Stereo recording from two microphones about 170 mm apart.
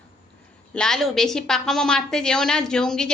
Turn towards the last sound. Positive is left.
turn(degrees=5)  # may be behind; listen again after turning